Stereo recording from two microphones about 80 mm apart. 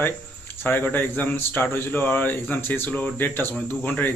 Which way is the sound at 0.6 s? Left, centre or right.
Left.